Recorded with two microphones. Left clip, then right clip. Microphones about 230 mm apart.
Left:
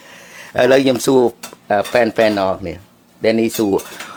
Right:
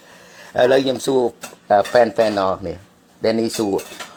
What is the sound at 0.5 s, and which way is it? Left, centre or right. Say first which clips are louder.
A man's voice: left 3 dB; centre.